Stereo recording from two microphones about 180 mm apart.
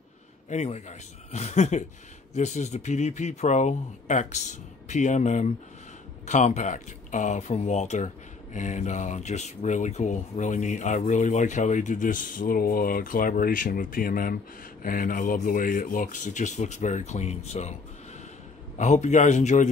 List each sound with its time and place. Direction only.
0.5 s speech: 40° left (ahead or behind)
18.8 s speech: 40° left (ahead or behind)